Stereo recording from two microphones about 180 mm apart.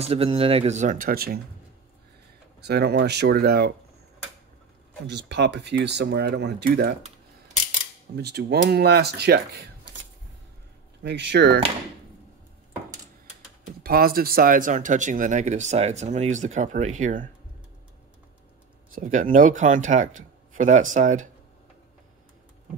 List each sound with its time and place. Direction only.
0.0 s speech: 30° right (ahead or behind); by 1.4 s 55° right (ahead or behind)
2.6 s speech: 65° right (ahead or behind)
5.0 s speech: 70° right (ahead or behind)
8.2 s speech: 65° right (ahead or behind)
11.0 s speech: 70° right (ahead or behind)
13.8 s speech: 55° right (ahead or behind)
18.9 s speech: 45° right (ahead or behind)